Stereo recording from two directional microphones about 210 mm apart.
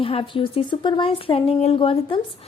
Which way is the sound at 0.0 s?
25° left (ahead or behind).